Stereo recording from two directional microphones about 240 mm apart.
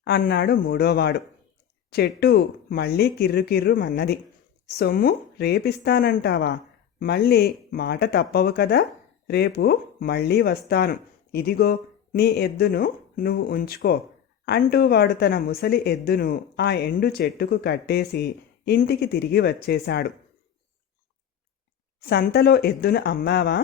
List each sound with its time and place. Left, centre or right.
0.0 s speech: left
22.0 s speech: left